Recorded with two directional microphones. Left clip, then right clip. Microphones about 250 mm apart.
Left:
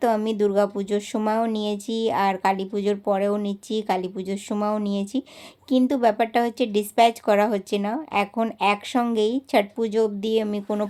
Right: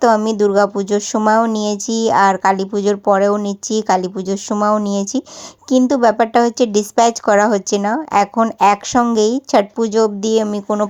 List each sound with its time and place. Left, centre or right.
0.0 s speech: centre